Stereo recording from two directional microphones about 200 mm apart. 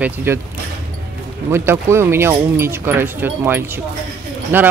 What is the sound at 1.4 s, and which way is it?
Speech, 10° right (ahead or behind).